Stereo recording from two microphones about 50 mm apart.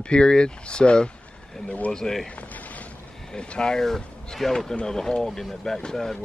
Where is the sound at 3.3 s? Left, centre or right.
Centre.